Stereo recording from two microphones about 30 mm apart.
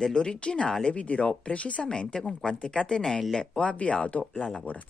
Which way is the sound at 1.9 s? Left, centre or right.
Left.